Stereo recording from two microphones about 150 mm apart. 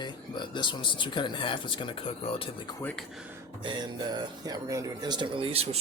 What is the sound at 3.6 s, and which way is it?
Speech, 30° right (ahead or behind).